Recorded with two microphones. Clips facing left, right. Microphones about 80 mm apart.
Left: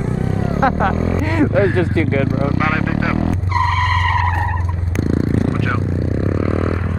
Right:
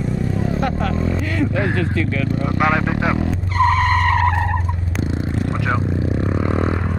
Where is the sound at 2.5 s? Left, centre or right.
Centre.